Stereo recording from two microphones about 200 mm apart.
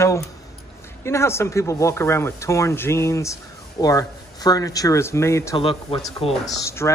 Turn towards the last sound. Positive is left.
turn(degrees=15)  # may be behind; listen again after turning